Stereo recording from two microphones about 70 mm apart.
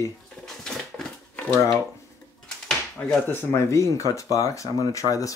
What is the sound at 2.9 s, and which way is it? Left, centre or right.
Speech, centre.